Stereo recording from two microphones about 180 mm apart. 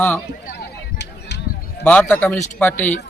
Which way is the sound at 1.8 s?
10° left (ahead or behind).